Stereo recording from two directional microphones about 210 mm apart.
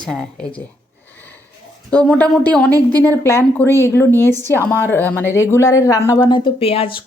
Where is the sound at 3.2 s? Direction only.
10° left (ahead or behind).